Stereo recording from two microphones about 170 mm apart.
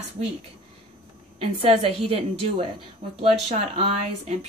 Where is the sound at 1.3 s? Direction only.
35° right (ahead or behind).